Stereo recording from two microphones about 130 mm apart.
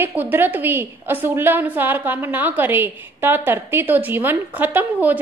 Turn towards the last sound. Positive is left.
turn(degrees=-15)  # may be behind; listen again after turning